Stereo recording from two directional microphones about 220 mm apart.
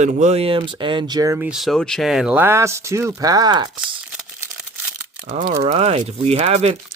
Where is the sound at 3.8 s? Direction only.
5° right (ahead or behind).